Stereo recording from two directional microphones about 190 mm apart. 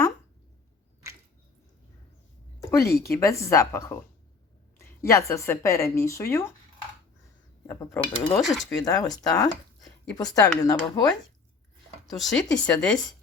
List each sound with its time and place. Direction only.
2.6 s speech: 15° left (ahead or behind)
7.7 s speech: 15° left (ahead or behind)
8.4 s speech: centre (ahead or behind)
8.8 s speech: 20° left (ahead or behind)
12.1 s speech: centre (ahead or behind)